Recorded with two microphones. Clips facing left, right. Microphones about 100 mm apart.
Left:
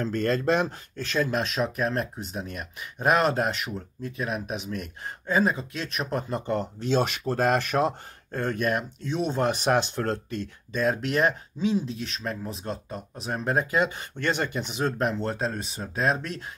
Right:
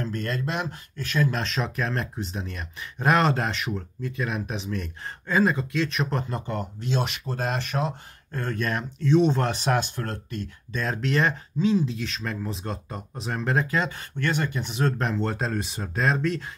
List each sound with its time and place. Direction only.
0.0 s speech: 35° left (ahead or behind)
1.3 s speech: 5° left (ahead or behind)
6.3 s speech: 20° left (ahead or behind)
6.8 s speech: 40° left (ahead or behind)
8.3 s speech: 25° left (ahead or behind)
8.5 s speech: 10° left (ahead or behind)
9.4 s speech: 15° left (ahead or behind)
10.7 s speech: 10° left (ahead or behind)
14.9 s speech: 5° left (ahead or behind)